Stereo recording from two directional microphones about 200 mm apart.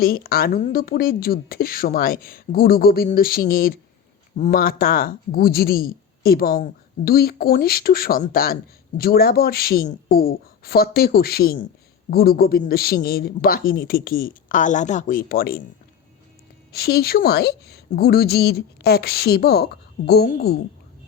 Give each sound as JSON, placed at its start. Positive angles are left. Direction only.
{"t": 0.0, "sound": "speech", "side_deg": 50}
{"t": 16.7, "sound": "speech", "side_deg": 50}